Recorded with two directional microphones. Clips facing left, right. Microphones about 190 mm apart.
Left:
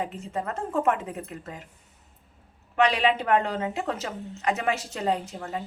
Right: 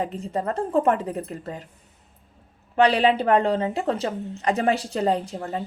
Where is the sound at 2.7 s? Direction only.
35° right (ahead or behind).